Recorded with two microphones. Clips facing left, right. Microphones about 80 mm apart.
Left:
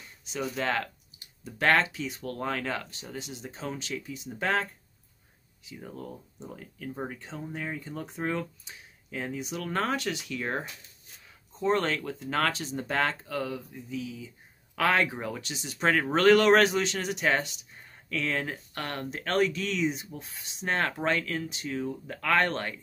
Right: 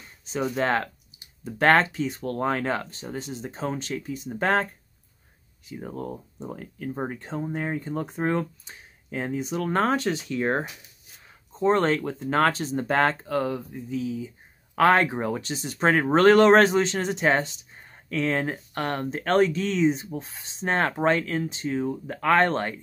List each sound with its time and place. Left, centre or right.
0.2 s speech: right
5.7 s speech: right